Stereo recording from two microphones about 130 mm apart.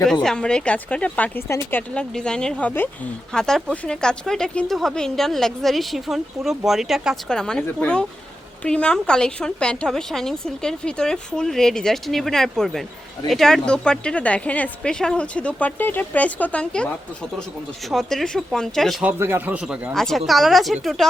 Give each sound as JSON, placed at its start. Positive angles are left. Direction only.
{"t": 0.0, "sound": "speech", "side_deg": 5}
{"t": 1.5, "sound": "speech", "side_deg": 20}
{"t": 1.9, "sound": "speech", "side_deg": 5}
{"t": 19.0, "sound": "speech", "side_deg": -15}